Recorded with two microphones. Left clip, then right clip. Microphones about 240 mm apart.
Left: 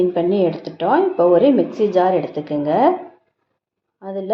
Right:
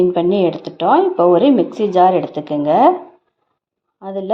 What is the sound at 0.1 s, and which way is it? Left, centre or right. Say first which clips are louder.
A woman's voice: right 2 dB; right.